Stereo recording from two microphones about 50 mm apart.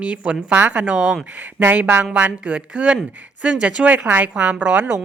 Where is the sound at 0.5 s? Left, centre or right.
Right.